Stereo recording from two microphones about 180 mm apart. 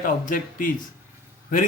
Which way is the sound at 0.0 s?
45° left (ahead or behind).